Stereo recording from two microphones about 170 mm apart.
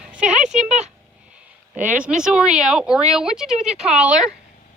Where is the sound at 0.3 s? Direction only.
45° right (ahead or behind).